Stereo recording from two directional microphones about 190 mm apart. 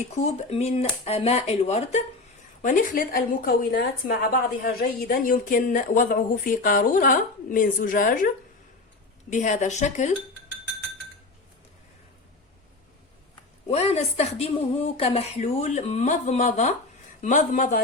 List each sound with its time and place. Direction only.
0.1 s a woman's voice: 35° left (ahead or behind)
9.3 s a woman's voice: 40° left (ahead or behind)
13.7 s a woman's voice: 35° left (ahead or behind)